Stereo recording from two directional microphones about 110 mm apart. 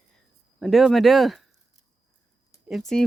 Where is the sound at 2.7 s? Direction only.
Centre (ahead or behind).